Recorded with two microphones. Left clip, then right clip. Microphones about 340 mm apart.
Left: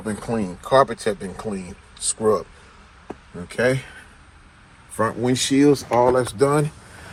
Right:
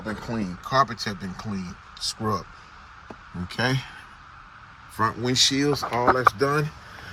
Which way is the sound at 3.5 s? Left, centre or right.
Centre.